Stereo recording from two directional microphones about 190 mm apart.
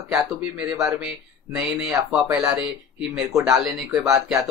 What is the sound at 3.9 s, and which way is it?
Speech, 15° right (ahead or behind).